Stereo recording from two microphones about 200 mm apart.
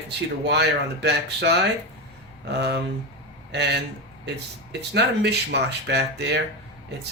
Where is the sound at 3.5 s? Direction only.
60° right (ahead or behind).